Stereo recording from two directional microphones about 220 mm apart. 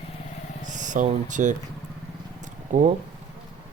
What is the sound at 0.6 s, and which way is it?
Speech, 35° right (ahead or behind).